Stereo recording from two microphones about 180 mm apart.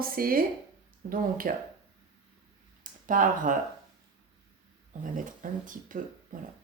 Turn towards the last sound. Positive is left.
turn(degrees=-50)  # may be behind; listen again after turning